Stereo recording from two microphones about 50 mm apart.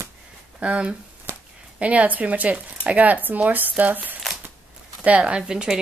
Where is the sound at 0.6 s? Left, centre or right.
Right.